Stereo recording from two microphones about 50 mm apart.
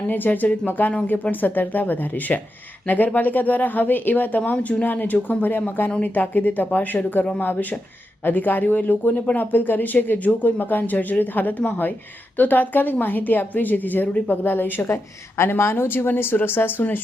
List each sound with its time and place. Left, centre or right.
0.1 s speech: left
14.8 s a woman's voice: left